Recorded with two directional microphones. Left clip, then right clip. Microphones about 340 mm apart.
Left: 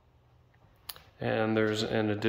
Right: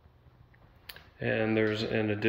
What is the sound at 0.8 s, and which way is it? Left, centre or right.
Computer keyboard, left.